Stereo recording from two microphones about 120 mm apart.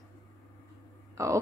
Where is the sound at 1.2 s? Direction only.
25° right (ahead or behind).